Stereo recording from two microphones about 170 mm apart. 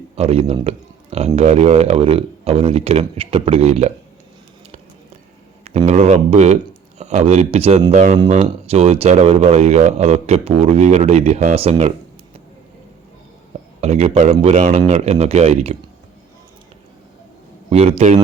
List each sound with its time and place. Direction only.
0.2 s a man's voice: 35° right (ahead or behind)
5.6 s speech: 40° right (ahead or behind)
13.8 s speech: 35° right (ahead or behind)
17.7 s speech: 35° right (ahead or behind)